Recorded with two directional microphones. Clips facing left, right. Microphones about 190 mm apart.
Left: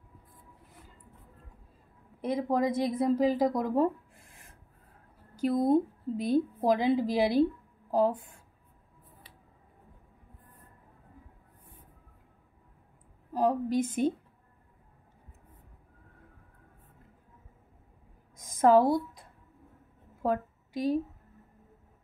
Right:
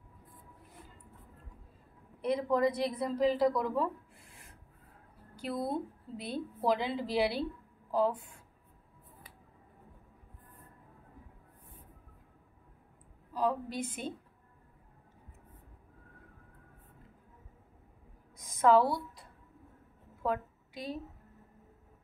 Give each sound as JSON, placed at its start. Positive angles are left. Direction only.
{"t": 2.3, "sound": "a woman's voice", "side_deg": 45}
{"t": 13.3, "sound": "a woman's voice", "side_deg": 45}
{"t": 18.3, "sound": "a sound", "side_deg": 45}